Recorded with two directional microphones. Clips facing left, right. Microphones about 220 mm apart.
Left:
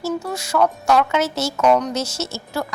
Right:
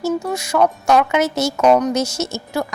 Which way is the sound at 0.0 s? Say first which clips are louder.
Right 4 dB; 15° right (ahead or behind).